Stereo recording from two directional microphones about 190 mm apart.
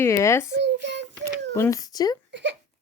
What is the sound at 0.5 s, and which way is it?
Speech, 70° right (ahead or behind).